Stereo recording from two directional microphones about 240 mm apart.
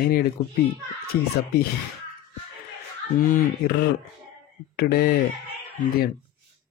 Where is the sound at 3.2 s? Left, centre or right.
Left.